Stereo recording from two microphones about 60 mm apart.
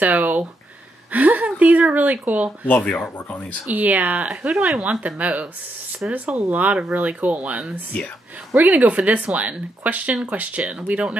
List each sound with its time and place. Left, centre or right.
0.0 s a sound: right
1.1 s speech: right
3.3 s speech: left
3.7 s speech: right
5.0 s speech: right